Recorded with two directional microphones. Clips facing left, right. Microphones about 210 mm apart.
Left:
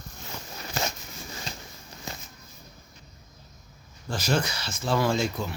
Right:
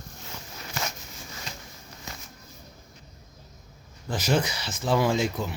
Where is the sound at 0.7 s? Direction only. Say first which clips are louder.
Left 3 dB; 30° left (ahead or behind).